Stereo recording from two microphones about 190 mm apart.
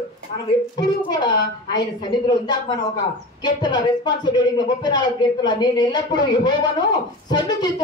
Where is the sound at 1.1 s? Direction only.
25° left (ahead or behind).